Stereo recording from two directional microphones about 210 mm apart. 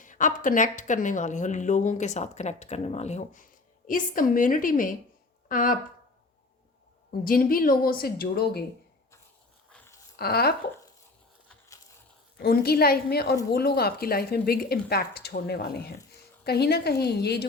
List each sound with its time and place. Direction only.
0.0 s speech: 35° left (ahead or behind)
7.1 s a woman's voice: 45° left (ahead or behind)
9.7 s a sound: 10° left (ahead or behind)
10.2 s a woman's voice: 50° left (ahead or behind)
12.4 s a woman's voice: 45° left (ahead or behind)